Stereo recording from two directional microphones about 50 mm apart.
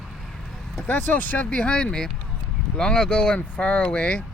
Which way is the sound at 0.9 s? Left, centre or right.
Left.